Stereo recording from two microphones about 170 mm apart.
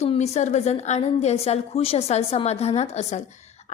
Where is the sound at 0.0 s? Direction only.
40° left (ahead or behind).